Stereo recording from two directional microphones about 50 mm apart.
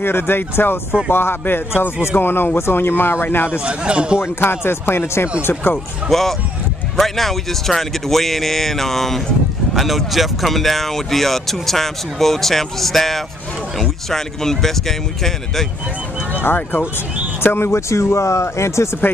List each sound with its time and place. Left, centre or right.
0.0 s speech: left
3.6 s speech: right
4.2 s speech: left
5.4 s speech: left
6.0 s speech: centre
16.3 s speech: left
17.6 s speech: left